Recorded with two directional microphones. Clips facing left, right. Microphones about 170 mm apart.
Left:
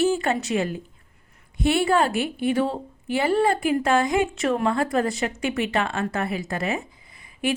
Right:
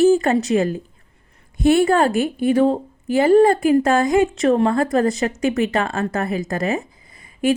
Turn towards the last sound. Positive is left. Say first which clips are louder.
# right 7 dB
turn(degrees=-45)  # may be behind; listen again after turning